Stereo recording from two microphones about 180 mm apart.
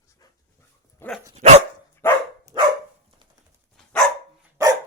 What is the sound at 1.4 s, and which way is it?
Dog, 35° right (ahead or behind).